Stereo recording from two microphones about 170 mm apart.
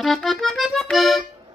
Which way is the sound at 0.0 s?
Centre (ahead or behind).